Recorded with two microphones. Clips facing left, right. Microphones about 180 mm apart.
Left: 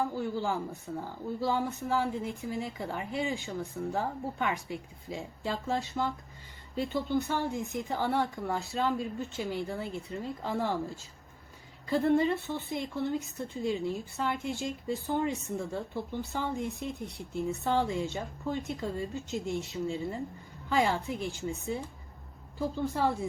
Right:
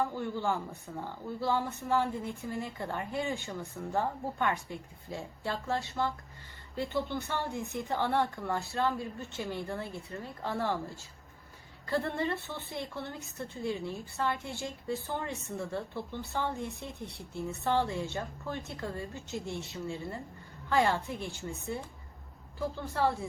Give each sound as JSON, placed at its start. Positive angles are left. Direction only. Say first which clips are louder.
{"t": 0.1, "sound": "speech", "louder": "left 1 dB", "side_deg": 10}